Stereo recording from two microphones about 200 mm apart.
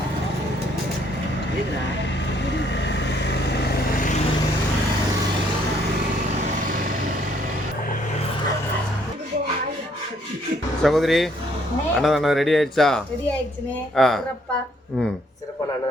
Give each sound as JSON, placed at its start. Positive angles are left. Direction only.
{"t": 2.5, "sound": "vehicle", "side_deg": 60}
{"t": 10.8, "sound": "speech", "side_deg": 0}